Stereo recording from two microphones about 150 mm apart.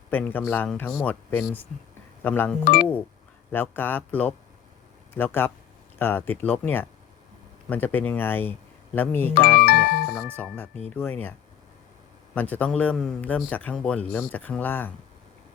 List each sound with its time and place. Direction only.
0.1 s speech: 10° left (ahead or behind)
9.6 s speech: 75° left (ahead or behind)
10.2 s speech: 10° left (ahead or behind)